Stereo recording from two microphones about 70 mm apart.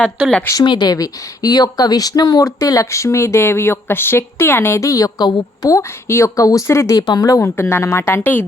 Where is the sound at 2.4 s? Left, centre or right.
Left.